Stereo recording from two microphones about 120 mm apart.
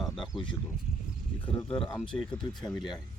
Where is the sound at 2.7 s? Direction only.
40° left (ahead or behind).